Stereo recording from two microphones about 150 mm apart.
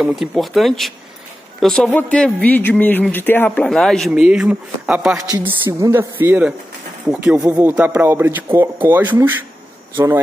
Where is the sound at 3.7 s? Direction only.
Centre (ahead or behind).